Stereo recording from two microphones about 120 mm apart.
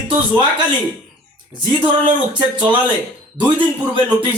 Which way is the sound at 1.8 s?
40° right (ahead or behind).